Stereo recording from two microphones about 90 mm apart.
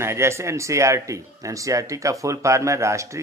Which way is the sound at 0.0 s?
30° right (ahead or behind).